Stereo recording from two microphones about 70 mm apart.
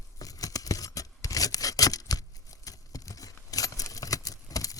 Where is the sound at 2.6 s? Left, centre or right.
Left.